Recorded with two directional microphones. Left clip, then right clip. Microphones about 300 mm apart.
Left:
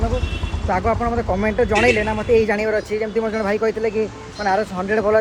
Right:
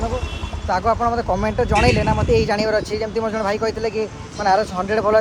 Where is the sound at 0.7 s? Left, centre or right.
Centre.